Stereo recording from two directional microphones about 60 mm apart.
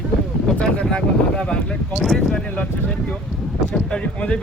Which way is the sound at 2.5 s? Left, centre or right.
Left.